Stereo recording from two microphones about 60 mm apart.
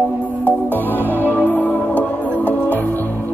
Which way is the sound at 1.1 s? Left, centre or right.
Left.